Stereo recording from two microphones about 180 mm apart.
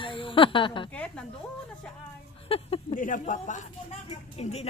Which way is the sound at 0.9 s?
5° left (ahead or behind).